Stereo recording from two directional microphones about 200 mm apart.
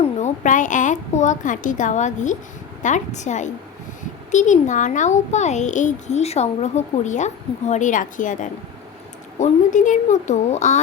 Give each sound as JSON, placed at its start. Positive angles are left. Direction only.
{"t": 0.0, "sound": "a woman's voice", "side_deg": 35}